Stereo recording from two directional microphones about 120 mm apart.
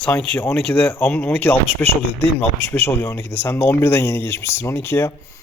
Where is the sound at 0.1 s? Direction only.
10° left (ahead or behind).